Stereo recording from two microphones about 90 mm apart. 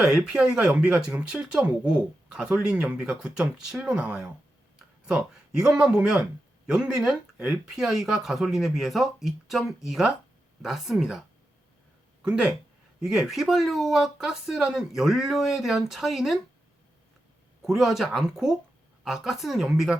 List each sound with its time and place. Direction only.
0.0 s speech: 5° right (ahead or behind)
13.0 s speech: 5° right (ahead or behind)
17.7 s speech: 5° right (ahead or behind)